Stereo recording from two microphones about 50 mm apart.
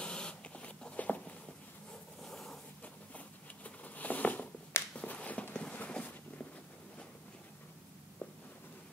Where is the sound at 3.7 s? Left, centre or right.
Left.